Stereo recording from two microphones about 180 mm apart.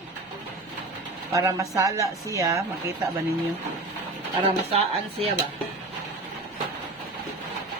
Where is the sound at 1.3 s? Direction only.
15° right (ahead or behind).